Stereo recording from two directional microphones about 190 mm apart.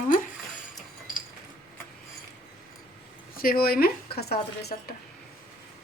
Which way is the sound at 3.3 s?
50° left (ahead or behind).